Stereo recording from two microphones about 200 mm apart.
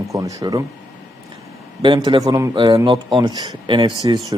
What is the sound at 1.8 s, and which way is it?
Speech, 25° right (ahead or behind).